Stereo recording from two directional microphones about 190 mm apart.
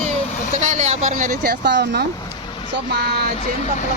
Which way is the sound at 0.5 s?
40° right (ahead or behind).